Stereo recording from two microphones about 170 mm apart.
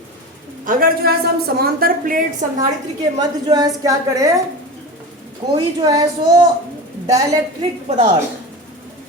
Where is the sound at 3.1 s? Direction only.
25° right (ahead or behind).